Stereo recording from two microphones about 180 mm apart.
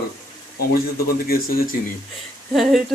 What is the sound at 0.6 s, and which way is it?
Speech, 55° left (ahead or behind).